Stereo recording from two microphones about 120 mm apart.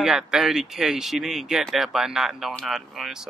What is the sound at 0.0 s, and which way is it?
Speech, 5° right (ahead or behind).